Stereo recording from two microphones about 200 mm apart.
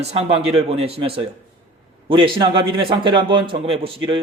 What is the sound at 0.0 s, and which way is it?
A man's voice, 30° right (ahead or behind).